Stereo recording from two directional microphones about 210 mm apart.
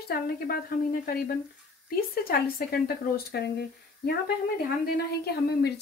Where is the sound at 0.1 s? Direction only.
45° left (ahead or behind).